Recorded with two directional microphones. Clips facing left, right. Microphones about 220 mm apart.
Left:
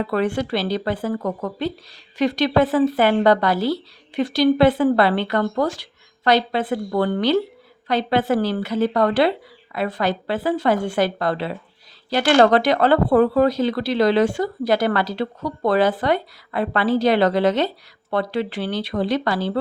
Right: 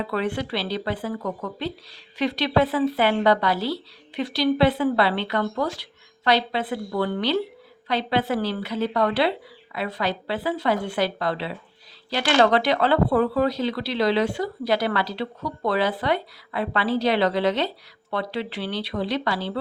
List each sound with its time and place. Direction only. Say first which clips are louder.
0.1 s speech: left 5 dB; 45° left (ahead or behind)